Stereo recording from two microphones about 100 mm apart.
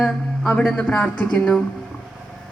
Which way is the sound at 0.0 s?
5° left (ahead or behind).